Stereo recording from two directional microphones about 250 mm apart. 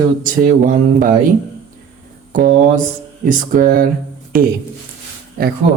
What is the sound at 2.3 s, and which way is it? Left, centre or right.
Speech, right.